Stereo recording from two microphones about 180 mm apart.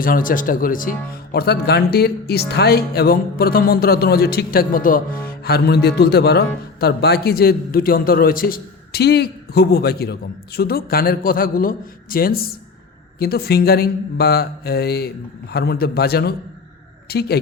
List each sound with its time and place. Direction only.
0.0 s speech: 50° left (ahead or behind)
1.3 s a man's voice: 65° left (ahead or behind)